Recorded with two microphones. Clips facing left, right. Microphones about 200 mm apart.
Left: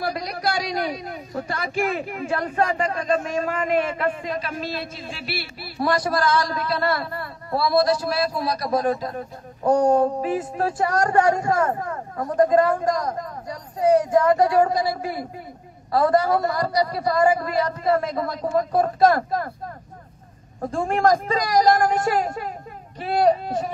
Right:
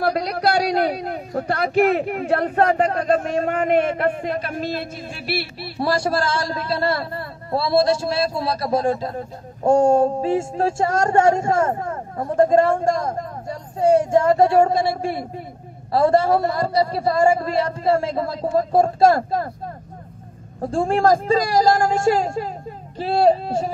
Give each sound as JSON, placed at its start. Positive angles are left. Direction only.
{"t": 0.0, "sound": "a man's voice", "side_deg": -65}
{"t": 5.6, "sound": "a man's voice", "side_deg": -30}
{"t": 20.7, "sound": "a man's voice", "side_deg": -30}